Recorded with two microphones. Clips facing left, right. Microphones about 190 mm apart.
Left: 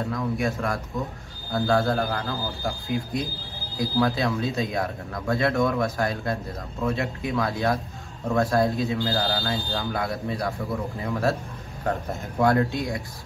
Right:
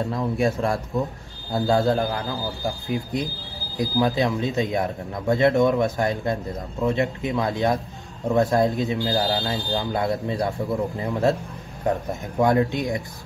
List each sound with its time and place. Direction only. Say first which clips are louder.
0.0 s speech: right 3 dB; 25° right (ahead or behind)